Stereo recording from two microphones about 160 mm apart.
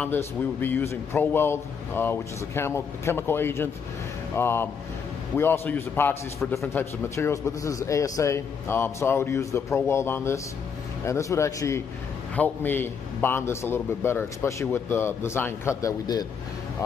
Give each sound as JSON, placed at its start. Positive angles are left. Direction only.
{"t": 0.0, "sound": "a man's voice", "side_deg": 10}